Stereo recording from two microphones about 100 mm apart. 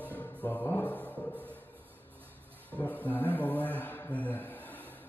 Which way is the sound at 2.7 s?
20° left (ahead or behind).